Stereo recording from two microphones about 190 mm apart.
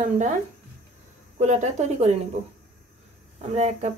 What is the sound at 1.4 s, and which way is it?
Speech, 35° right (ahead or behind).